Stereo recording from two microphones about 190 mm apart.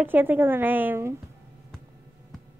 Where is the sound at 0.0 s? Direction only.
10° right (ahead or behind).